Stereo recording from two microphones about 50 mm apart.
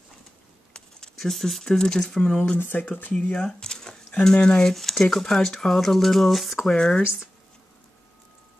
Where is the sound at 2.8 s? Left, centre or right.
Left.